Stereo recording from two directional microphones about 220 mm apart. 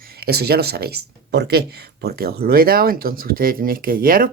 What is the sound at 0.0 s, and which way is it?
Speech, 45° right (ahead or behind).